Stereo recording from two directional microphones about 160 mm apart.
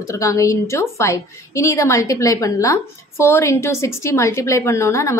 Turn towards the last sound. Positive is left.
turn(degrees=20)  # may be behind; listen again after turning